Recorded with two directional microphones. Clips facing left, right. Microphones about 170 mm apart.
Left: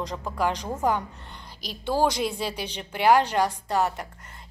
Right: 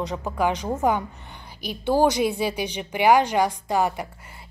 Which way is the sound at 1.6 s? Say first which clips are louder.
Right 4 dB; 60° right (ahead or behind).